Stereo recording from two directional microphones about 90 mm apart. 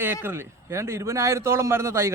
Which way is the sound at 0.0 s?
25° right (ahead or behind).